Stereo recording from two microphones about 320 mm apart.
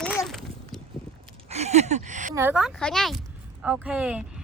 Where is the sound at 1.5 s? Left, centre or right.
Centre.